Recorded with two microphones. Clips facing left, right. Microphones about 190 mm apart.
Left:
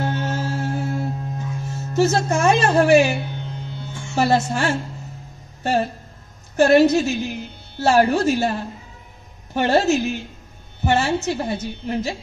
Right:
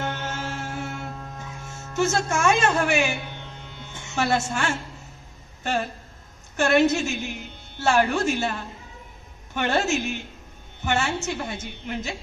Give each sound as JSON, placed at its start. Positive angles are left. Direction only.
{"t": 0.0, "sound": "music", "side_deg": 35}
{"t": 1.6, "sound": "speech", "side_deg": 35}
{"t": 3.6, "sound": "music", "side_deg": 35}
{"t": 4.1, "sound": "a woman's voice", "side_deg": 35}